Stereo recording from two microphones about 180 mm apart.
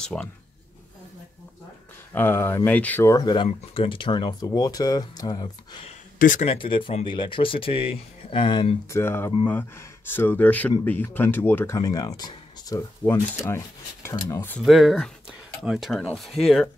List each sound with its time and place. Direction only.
0.0 s speech: 5° left (ahead or behind)
2.1 s speech: 15° left (ahead or behind)
6.1 s speech: 50° left (ahead or behind)
6.4 s speech: 30° left (ahead or behind)
8.9 s speech: 15° left (ahead or behind)
14.6 s speech: centre (ahead or behind)